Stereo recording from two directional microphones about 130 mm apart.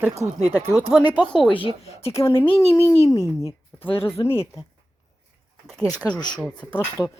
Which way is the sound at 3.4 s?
25° left (ahead or behind).